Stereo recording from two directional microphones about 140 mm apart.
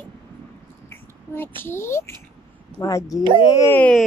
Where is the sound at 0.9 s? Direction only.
15° left (ahead or behind).